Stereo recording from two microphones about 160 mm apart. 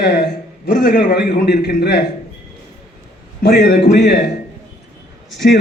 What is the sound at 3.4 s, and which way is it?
Speech, 90° left.